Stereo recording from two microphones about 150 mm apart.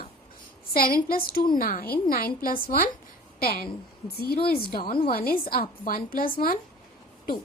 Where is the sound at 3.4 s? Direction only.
90° left.